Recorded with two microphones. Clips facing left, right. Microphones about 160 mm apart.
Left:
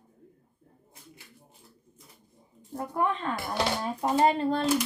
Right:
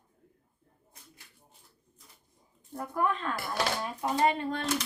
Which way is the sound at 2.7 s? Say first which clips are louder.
Left 2 dB; 25° left (ahead or behind).